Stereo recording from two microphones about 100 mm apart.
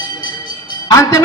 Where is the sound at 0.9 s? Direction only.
35° left (ahead or behind).